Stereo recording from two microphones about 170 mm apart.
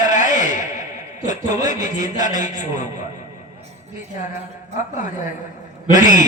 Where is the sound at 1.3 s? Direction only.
50° left (ahead or behind).